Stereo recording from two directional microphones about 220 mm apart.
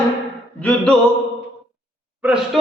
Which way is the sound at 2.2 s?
5° right (ahead or behind).